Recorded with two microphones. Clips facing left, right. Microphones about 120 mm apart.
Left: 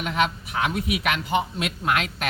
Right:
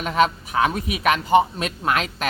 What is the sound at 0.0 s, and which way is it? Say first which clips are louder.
Speech: right 5 dB; 40° right (ahead or behind).